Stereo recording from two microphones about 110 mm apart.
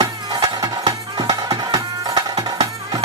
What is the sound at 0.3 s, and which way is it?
Music, 35° right (ahead or behind).